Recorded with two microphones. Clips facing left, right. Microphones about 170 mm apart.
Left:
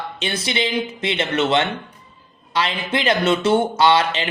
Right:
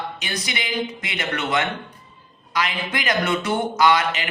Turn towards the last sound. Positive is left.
turn(degrees=30)  # may be behind; listen again after turning